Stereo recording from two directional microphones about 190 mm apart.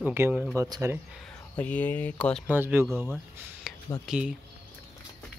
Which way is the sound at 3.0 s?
Centre (ahead or behind).